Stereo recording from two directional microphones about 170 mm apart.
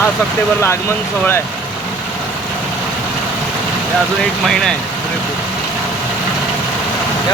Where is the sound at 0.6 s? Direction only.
15° left (ahead or behind).